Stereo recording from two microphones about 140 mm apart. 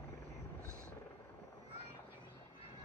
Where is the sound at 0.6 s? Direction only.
20° right (ahead or behind).